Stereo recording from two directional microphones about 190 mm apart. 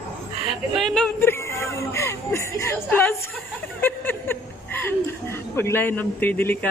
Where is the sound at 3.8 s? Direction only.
10° left (ahead or behind).